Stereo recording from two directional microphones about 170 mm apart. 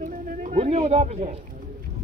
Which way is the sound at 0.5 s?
35° right (ahead or behind).